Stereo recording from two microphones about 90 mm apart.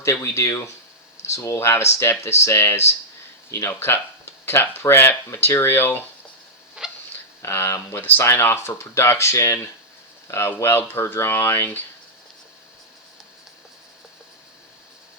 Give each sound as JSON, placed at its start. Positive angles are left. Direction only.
{"t": 0.0, "sound": "speech", "side_deg": 35}
{"t": 6.8, "sound": "cat", "side_deg": -10}
{"t": 7.4, "sound": "speech", "side_deg": 30}